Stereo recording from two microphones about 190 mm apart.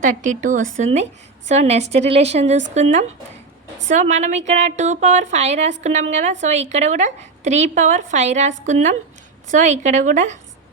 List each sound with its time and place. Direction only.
0.0 s a woman's voice: 40° right (ahead or behind)